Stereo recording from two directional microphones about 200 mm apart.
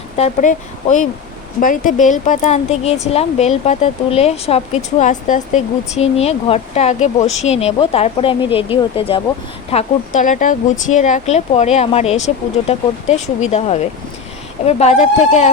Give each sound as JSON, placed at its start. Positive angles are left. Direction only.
{"t": 0.2, "sound": "speech", "side_deg": 35}